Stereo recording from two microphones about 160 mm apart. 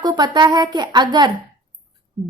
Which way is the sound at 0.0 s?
25° right (ahead or behind).